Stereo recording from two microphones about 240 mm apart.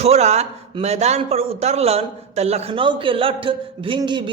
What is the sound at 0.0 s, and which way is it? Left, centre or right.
A man's voice, right.